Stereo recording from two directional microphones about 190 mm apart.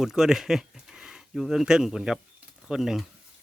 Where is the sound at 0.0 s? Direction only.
Centre (ahead or behind).